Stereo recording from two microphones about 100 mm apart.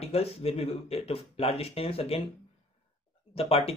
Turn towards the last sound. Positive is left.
turn(degrees=80)